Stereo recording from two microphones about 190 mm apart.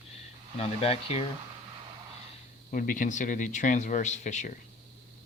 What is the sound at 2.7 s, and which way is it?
Speech, 45° left (ahead or behind).